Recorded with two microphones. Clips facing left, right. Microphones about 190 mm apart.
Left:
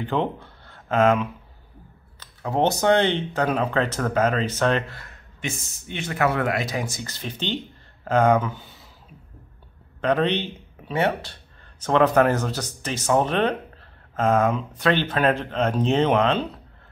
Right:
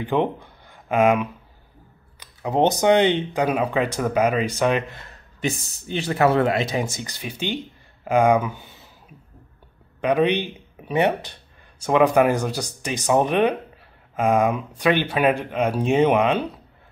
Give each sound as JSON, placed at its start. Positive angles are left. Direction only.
{"t": 0.0, "sound": "speech", "side_deg": -15}
{"t": 5.4, "sound": "speech", "side_deg": -35}
{"t": 7.1, "sound": "speech", "side_deg": -10}
{"t": 9.9, "sound": "speech", "side_deg": -10}